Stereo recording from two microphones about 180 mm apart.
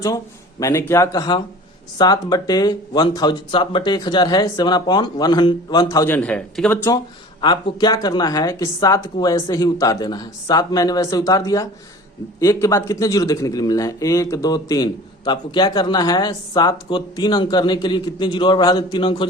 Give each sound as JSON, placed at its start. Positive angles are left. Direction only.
{"t": 0.6, "sound": "a man's voice", "side_deg": 15}
{"t": 6.1, "sound": "speech", "side_deg": 5}
{"t": 7.4, "sound": "a man's voice", "side_deg": 25}